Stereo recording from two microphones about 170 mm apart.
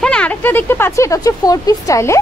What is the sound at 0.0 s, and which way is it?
Speech, 5° left (ahead or behind).